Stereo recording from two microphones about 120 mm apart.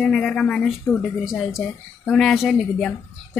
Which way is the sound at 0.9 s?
20° left (ahead or behind).